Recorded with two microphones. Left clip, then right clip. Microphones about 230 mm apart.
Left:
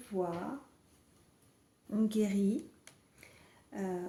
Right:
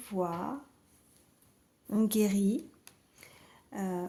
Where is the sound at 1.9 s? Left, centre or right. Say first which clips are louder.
Right 4 dB; right.